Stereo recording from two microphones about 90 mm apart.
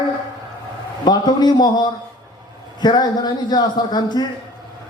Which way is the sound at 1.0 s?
50° left (ahead or behind).